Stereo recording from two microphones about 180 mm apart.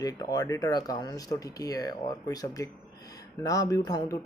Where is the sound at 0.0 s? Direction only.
20° left (ahead or behind).